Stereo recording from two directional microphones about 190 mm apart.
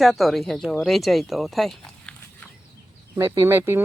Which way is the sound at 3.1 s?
15° right (ahead or behind).